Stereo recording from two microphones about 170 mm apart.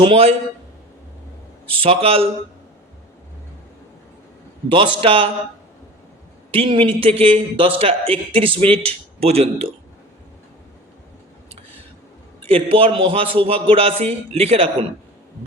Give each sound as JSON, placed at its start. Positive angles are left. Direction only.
{"t": 0.0, "sound": "a man's voice", "side_deg": -35}
{"t": 1.8, "sound": "a man's voice", "side_deg": -35}
{"t": 4.7, "sound": "a man's voice", "side_deg": -30}
{"t": 6.5, "sound": "a man's voice", "side_deg": -30}
{"t": 12.5, "sound": "a man's voice", "side_deg": -35}